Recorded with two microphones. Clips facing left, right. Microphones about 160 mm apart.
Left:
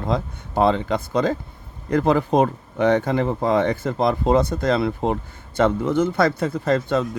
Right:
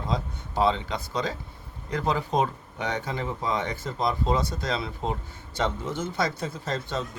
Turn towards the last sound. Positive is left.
turn(degrees=60)  # may be behind; listen again after turning